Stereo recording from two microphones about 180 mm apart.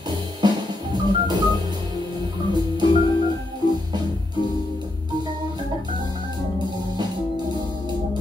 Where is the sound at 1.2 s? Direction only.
25° right (ahead or behind).